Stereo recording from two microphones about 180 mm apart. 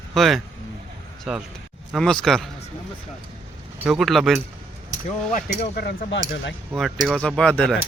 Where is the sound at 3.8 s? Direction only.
Centre (ahead or behind).